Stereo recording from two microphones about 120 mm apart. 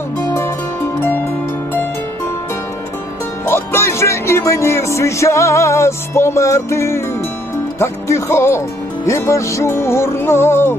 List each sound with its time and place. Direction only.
3.4 s music: 20° left (ahead or behind)